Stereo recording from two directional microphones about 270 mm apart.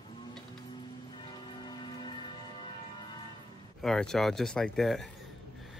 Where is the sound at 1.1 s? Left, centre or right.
Centre.